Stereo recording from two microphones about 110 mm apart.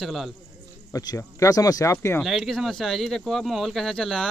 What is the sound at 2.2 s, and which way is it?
Speech, centre (ahead or behind).